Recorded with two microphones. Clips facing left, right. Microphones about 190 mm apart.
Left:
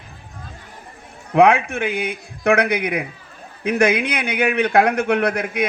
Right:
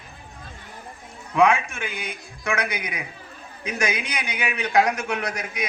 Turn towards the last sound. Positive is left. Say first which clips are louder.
# left 9 dB
turn(degrees=60)  # may be behind; listen again after turning